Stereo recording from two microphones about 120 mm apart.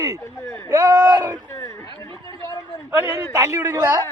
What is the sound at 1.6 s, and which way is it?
Chatter, 30° left (ahead or behind).